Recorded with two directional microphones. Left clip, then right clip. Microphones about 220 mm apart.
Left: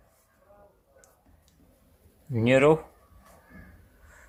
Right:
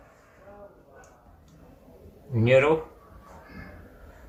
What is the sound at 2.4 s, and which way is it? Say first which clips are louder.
Speech: right 1 dB; 50° left (ahead or behind).